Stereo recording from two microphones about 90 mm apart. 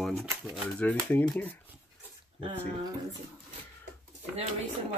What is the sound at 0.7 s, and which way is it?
Speech, 15° left (ahead or behind).